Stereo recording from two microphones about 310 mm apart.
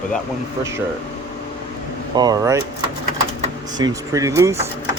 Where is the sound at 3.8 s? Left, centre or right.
Centre.